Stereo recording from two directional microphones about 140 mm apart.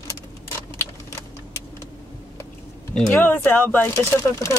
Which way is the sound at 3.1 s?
15° left (ahead or behind).